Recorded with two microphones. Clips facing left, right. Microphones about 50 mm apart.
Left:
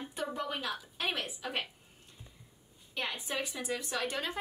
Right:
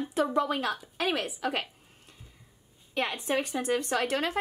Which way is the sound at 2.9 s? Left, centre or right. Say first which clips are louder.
Right 7 dB; right.